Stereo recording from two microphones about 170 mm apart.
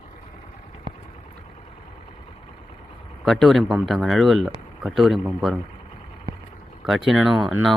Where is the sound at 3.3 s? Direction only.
Centre (ahead or behind).